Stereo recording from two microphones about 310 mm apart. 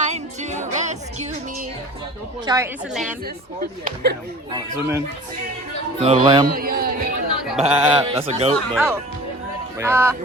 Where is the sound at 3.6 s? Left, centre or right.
Right.